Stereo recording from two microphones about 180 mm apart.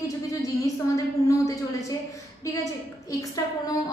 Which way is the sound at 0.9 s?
20° left (ahead or behind).